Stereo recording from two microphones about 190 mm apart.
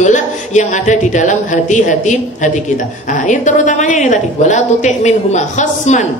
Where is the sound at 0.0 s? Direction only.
40° left (ahead or behind).